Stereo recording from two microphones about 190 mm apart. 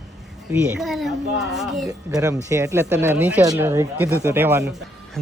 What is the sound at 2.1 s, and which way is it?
Speech, 15° right (ahead or behind).